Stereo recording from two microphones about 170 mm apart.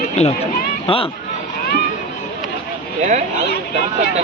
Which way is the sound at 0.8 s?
30° left (ahead or behind).